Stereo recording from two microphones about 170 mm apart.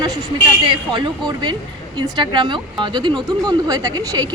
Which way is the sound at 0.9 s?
25° right (ahead or behind).